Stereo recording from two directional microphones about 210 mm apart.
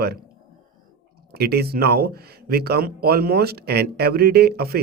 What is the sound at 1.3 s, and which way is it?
Speech, 50° right (ahead or behind).